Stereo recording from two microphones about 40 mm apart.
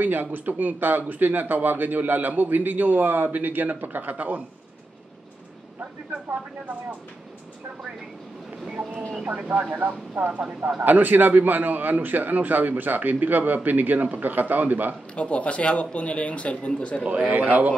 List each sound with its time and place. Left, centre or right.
0.0 s speech: right
9.4 s speech: right
15.1 s speech: left
17.0 s speech: right